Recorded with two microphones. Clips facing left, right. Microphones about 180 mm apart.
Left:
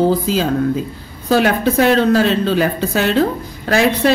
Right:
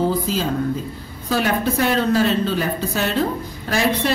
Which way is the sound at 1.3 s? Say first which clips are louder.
Left 6 dB; 75° left (ahead or behind).